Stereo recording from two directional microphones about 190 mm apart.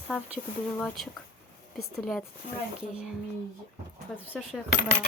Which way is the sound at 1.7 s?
Centre (ahead or behind).